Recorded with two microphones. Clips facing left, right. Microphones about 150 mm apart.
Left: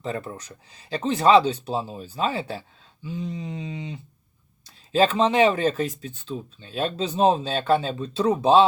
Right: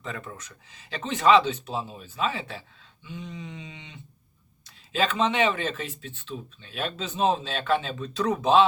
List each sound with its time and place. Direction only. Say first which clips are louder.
0.0 s speech: left 6 dB; 35° left (ahead or behind)